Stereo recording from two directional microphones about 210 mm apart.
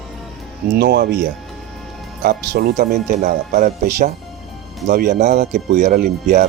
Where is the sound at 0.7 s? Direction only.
50° right (ahead or behind).